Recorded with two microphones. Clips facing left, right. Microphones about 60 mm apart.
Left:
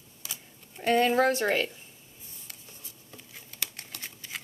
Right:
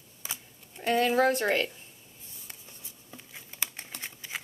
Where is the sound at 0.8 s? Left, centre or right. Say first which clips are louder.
Left 1 dB; centre.